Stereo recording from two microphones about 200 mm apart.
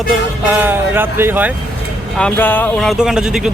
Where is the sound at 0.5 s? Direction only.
10° right (ahead or behind).